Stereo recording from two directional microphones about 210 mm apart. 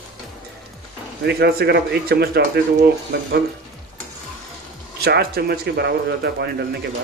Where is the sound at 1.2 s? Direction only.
50° right (ahead or behind).